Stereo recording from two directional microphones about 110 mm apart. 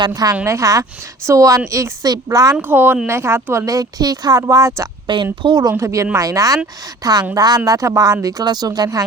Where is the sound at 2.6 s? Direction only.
20° right (ahead or behind).